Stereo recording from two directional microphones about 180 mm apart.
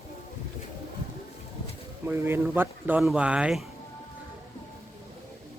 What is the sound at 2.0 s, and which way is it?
Speech, 10° right (ahead or behind).